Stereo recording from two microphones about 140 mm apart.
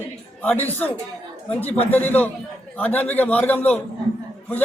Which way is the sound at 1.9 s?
10° left (ahead or behind).